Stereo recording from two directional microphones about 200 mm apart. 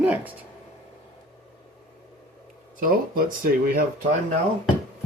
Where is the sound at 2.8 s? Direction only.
45° right (ahead or behind).